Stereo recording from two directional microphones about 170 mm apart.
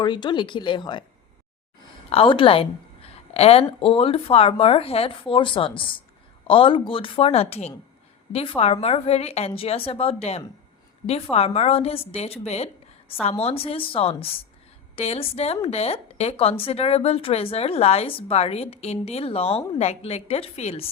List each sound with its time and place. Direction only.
0.0 s speech: 25° left (ahead or behind)
2.0 s a woman's voice: 30° left (ahead or behind)